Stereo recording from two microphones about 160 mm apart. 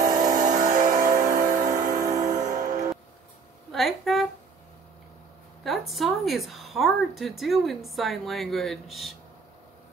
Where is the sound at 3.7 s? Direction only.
Centre (ahead or behind).